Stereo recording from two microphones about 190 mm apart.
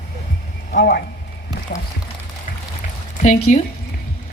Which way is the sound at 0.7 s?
55° left (ahead or behind).